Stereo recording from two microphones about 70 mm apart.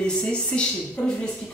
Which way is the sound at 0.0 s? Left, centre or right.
Centre.